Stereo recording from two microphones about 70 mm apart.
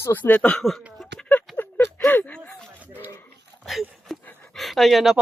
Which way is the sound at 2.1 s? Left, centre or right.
Left.